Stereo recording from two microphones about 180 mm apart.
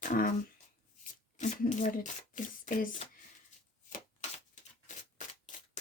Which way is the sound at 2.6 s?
50° left (ahead or behind).